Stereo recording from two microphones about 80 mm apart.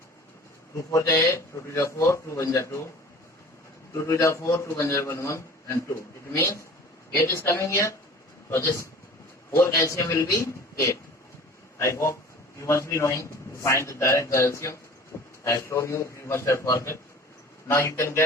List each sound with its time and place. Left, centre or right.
0.8 s a man's voice: left
3.9 s a man's voice: left
15.1 s a sound: left
15.4 s a man's voice: left